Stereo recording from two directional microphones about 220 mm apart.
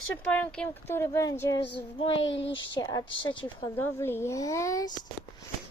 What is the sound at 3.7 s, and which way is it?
Speech, 10° left (ahead or behind).